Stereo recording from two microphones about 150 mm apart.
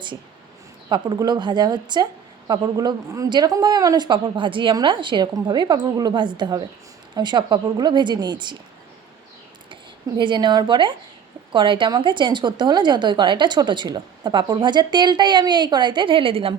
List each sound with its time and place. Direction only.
0.9 s a woman's voice: 30° right (ahead or behind)
10.2 s a woman's voice: 30° right (ahead or behind)